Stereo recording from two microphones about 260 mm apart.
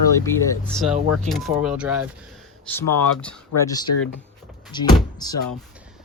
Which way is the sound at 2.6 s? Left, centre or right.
Centre.